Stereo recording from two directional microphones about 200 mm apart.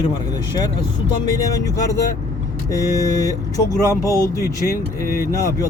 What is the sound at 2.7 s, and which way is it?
Speech, 15° left (ahead or behind).